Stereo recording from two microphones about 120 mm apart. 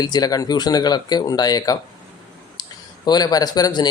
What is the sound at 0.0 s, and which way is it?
Speech, 35° left (ahead or behind).